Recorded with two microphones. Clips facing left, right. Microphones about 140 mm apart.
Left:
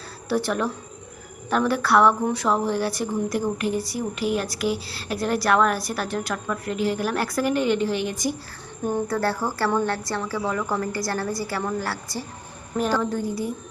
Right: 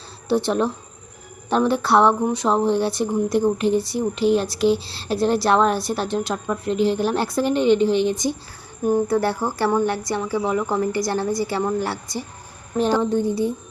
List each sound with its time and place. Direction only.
0.3 s speech: 25° right (ahead or behind)